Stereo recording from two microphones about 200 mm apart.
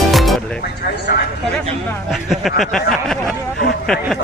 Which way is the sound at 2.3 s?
Centre (ahead or behind).